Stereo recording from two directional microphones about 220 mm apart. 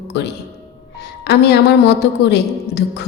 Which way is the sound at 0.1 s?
50° left (ahead or behind).